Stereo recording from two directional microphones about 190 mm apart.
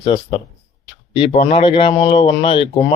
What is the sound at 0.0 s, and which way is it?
Speech, 30° left (ahead or behind).